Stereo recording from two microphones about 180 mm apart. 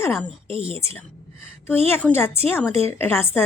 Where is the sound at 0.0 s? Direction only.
15° left (ahead or behind).